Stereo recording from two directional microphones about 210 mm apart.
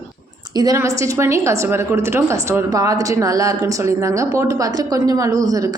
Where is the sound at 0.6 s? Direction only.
15° right (ahead or behind).